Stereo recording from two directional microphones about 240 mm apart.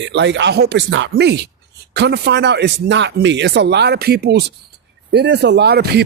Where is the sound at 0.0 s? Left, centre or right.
Right.